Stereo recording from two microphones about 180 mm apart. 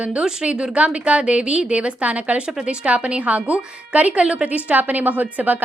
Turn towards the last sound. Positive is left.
turn(degrees=-10)  # may be behind; listen again after turning